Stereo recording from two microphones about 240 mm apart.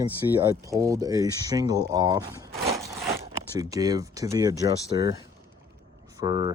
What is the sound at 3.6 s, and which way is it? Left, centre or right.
Speech, centre.